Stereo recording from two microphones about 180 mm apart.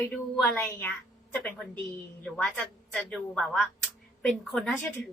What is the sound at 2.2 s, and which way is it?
A woman's voice, 5° left (ahead or behind).